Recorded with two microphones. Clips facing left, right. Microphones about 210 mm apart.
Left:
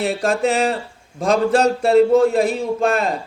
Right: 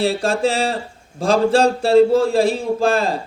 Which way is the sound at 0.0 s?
30° right (ahead or behind).